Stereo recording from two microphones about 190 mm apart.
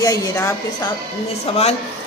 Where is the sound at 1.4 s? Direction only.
35° left (ahead or behind).